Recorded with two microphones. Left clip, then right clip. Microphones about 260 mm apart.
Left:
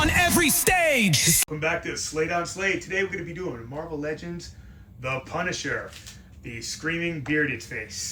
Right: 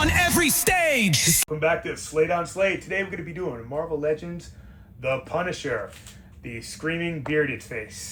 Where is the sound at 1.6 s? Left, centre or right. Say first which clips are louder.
Right 3 dB; centre.